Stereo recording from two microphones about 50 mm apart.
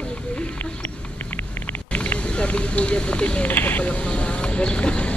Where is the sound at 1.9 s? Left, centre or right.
Left.